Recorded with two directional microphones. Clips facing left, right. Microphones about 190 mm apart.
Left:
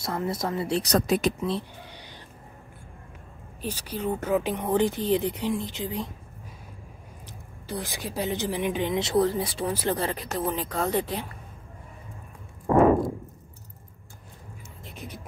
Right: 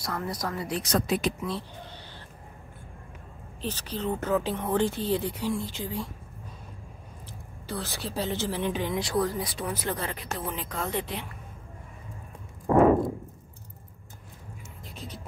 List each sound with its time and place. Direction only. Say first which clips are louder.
0.0 s speech: left 4 dB; 25° left (ahead or behind); by 1.3 s 45° left (ahead or behind)
1.9 s a sound: even; 15° left (ahead or behind)
3.6 s speech: left 1 dB; 10° left (ahead or behind)
7.7 s speech: left 1 dB; 15° left (ahead or behind); by 11.2 s 40° left (ahead or behind)